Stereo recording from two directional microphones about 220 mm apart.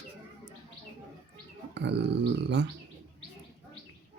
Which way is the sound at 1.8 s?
50° right (ahead or behind).